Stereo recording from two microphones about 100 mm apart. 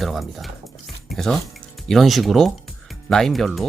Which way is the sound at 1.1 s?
5° left (ahead or behind).